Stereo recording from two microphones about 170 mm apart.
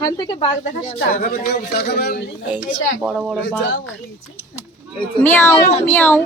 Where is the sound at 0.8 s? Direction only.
50° left (ahead or behind); by 2.2 s 65° left (ahead or behind).